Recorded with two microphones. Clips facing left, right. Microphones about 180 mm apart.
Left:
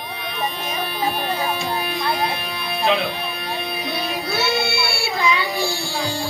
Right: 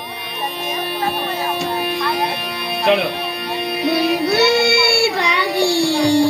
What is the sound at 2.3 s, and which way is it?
Music, 70° right (ahead or behind).